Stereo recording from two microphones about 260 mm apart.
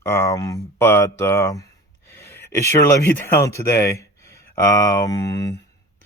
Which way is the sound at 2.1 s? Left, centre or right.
Centre.